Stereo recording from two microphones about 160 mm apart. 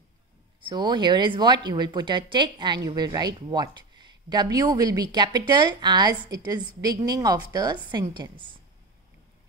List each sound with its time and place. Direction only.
0.6 s speech: 30° right (ahead or behind)